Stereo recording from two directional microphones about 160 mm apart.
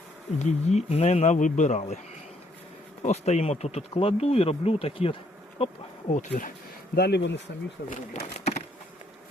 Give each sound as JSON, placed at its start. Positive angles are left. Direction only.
{"t": 0.3, "sound": "speech", "side_deg": 45}
{"t": 3.0, "sound": "speech", "side_deg": 45}
{"t": 6.1, "sound": "speech", "side_deg": 50}
{"t": 6.9, "sound": "speech", "side_deg": 85}
{"t": 7.9, "sound": "speech", "side_deg": 45}